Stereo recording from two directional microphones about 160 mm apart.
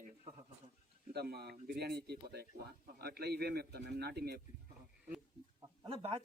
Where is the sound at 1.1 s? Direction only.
80° right.